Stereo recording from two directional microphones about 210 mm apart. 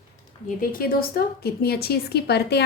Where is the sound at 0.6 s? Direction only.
45° left (ahead or behind).